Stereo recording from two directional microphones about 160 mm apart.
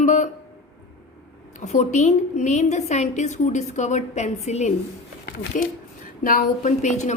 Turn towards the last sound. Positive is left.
turn(degrees=50)  # may be behind; listen again after turning